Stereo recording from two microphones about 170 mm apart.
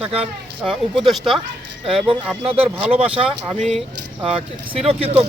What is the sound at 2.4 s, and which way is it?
Speech, 35° right (ahead or behind).